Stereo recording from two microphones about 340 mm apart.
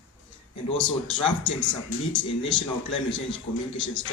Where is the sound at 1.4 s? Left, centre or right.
Left.